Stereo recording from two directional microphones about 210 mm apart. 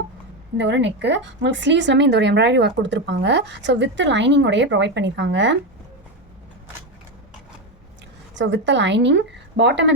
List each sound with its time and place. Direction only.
0.5 s speech: 55° right (ahead or behind)
8.4 s speech: 55° right (ahead or behind)